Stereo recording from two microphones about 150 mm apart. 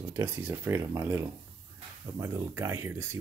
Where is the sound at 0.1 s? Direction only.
15° right (ahead or behind).